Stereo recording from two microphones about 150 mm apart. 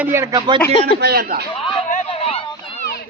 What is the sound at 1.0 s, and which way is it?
Speech, 90° right.